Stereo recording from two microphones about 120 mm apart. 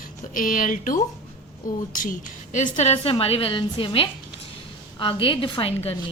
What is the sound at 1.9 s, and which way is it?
A woman's voice, 90° left.